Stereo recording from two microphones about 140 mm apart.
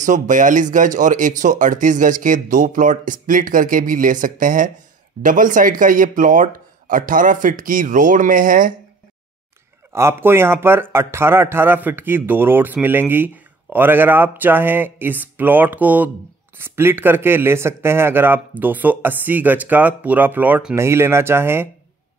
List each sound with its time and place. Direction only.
0.0 s speech: 65° right (ahead or behind)
9.9 s speech: 20° right (ahead or behind)